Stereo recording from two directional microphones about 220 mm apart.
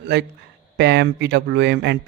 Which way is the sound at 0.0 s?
50° right (ahead or behind).